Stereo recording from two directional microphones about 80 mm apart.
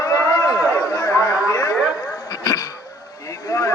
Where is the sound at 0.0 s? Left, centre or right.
Left.